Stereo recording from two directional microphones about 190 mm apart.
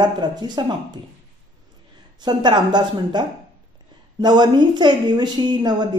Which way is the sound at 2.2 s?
20° right (ahead or behind).